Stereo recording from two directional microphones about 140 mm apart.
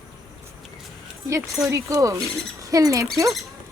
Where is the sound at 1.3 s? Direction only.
20° right (ahead or behind).